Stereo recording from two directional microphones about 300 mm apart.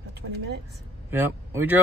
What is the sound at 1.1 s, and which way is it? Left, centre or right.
Speech, centre.